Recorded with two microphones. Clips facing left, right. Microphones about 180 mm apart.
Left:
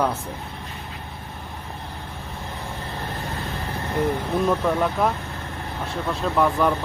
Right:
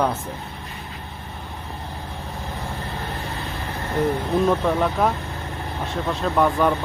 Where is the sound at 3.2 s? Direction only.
35° left (ahead or behind).